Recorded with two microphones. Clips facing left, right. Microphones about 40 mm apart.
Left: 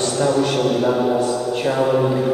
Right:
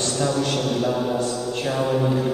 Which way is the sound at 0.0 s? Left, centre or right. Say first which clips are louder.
Left 5 dB; centre.